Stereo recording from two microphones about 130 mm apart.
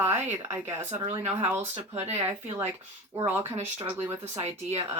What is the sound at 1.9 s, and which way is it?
Speech, 55° right (ahead or behind).